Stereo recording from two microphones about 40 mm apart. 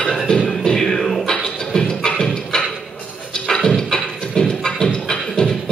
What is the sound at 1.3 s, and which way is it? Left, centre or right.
Beatboxing, centre.